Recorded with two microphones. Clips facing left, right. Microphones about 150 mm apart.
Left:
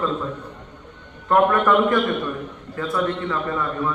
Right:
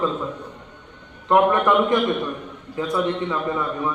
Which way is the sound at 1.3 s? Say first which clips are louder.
Even; 15° right (ahead or behind).